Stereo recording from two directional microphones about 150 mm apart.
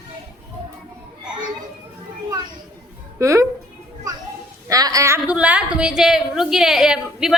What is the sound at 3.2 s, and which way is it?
Speech, 20° right (ahead or behind).